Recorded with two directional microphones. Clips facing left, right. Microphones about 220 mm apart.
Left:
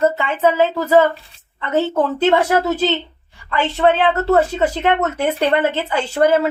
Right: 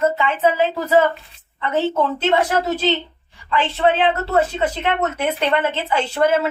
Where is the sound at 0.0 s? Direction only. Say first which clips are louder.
Left 1 dB; 40° left (ahead or behind).